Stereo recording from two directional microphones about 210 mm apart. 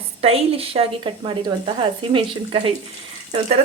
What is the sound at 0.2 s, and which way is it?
Speech, 30° right (ahead or behind).